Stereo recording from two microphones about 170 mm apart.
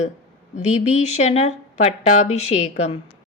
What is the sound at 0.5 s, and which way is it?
A woman's voice, 40° left (ahead or behind).